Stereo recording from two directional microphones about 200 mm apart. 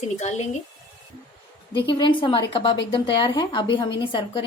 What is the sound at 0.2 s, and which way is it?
Speech, 35° left (ahead or behind).